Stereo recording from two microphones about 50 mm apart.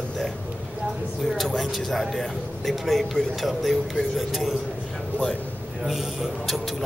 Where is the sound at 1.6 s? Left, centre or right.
Centre.